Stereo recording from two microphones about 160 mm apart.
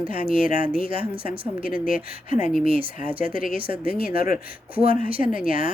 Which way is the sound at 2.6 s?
35° right (ahead or behind).